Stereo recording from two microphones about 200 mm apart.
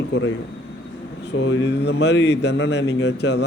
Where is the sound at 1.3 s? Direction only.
65° left (ahead or behind).